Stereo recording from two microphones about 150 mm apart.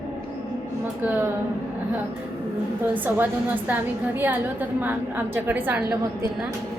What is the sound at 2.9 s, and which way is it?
A woman's voice, 10° right (ahead or behind).